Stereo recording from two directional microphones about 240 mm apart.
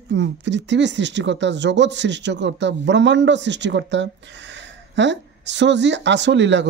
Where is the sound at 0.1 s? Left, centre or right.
Right.